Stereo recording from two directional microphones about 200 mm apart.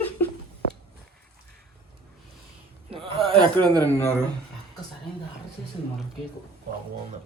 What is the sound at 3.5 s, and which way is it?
Speech, 5° left (ahead or behind).